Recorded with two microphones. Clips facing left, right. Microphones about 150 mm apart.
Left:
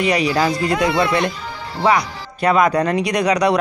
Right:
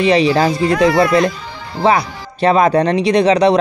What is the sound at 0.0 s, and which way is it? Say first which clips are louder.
Speech: right 5 dB; 25° right (ahead or behind).